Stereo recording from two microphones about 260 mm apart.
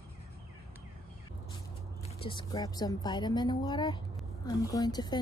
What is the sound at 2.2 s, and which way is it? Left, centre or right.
A woman's voice, centre.